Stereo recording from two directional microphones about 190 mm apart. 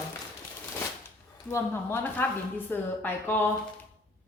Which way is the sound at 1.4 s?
15° left (ahead or behind).